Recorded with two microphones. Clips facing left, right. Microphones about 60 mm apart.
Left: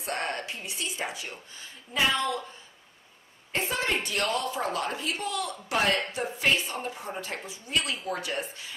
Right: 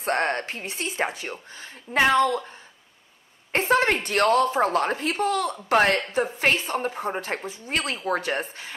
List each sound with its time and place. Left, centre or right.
0.0 s a woman's voice: right
3.5 s a woman's voice: right